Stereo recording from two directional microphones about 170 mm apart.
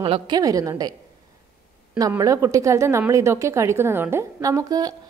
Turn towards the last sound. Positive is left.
turn(degrees=-20)  # may be behind; listen again after turning